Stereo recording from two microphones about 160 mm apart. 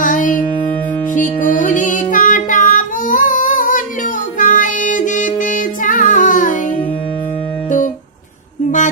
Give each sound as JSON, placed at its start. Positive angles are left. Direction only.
{"t": 0.0, "sound": "music", "side_deg": 55}